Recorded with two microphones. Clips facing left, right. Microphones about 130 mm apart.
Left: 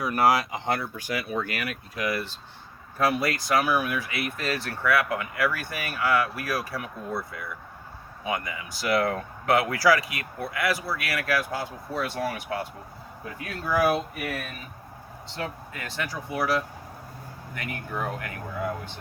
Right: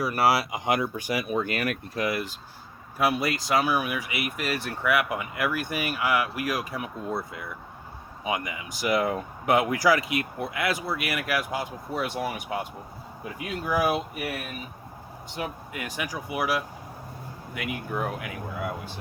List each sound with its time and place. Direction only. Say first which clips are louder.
0.0 s speech: left 1 dB; 5° right (ahead or behind)